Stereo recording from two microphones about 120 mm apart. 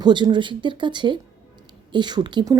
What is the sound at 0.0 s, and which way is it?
Speech, 40° right (ahead or behind).